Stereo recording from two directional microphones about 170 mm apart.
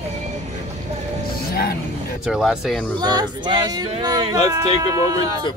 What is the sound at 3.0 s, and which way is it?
Speech, 25° right (ahead or behind).